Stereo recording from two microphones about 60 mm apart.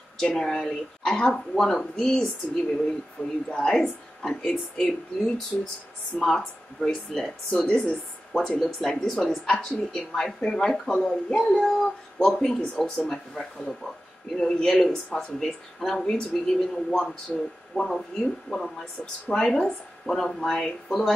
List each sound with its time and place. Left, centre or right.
0.2 s speech: centre
7.6 s speech: left
8.3 s speech: centre
17.3 s speech: left
17.7 s speech: centre